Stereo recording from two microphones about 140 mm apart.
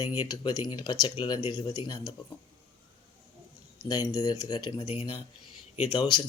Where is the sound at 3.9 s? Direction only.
25° left (ahead or behind).